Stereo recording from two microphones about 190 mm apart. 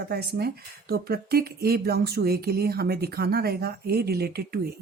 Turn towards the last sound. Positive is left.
turn(degrees=-55)  # may be behind; listen again after turning